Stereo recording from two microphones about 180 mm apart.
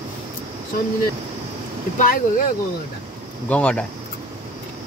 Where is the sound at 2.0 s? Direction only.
50° left (ahead or behind).